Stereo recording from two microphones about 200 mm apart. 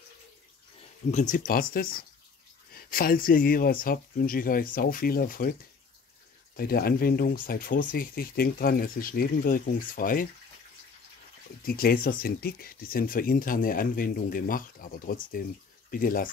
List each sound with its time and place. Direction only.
1.1 s speech: 40° left (ahead or behind)
6.5 s speech: 50° left (ahead or behind)
11.6 s speech: 45° left (ahead or behind)